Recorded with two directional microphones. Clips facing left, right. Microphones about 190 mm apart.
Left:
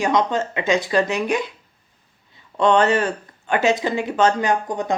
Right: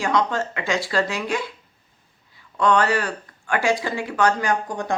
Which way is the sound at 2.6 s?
20° left (ahead or behind).